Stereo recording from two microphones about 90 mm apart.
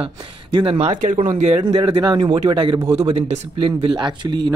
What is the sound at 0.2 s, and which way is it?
Speech, 80° right.